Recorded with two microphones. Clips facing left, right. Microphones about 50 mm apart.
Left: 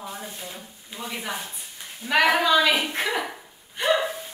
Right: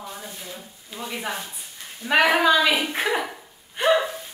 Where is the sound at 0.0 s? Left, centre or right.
Centre.